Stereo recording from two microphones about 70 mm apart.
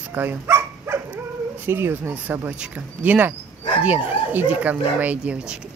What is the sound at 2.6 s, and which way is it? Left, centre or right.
Speech, centre.